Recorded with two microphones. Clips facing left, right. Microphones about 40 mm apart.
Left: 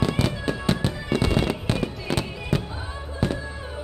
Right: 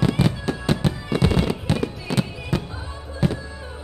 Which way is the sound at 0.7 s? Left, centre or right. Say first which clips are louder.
Right 2 dB; centre.